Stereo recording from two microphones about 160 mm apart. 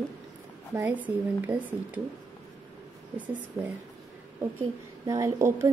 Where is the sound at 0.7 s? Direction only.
10° right (ahead or behind).